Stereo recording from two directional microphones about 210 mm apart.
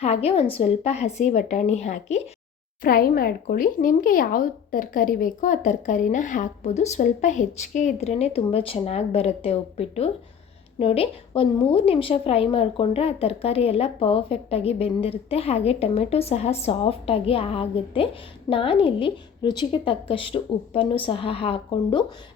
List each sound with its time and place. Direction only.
0.0 s speech: 30° left (ahead or behind)
2.8 s a woman's voice: 45° left (ahead or behind); by 22.0 s 25° left (ahead or behind)